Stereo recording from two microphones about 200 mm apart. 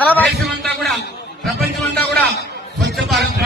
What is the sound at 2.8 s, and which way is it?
Speech, 55° right (ahead or behind).